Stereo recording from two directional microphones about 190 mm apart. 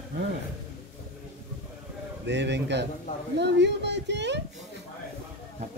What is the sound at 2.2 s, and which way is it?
Speech, 65° right (ahead or behind).